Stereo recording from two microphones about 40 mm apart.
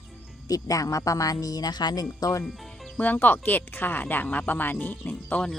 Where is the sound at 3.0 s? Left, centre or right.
Left.